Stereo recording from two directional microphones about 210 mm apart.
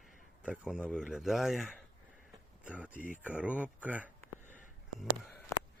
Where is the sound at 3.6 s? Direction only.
5° right (ahead or behind).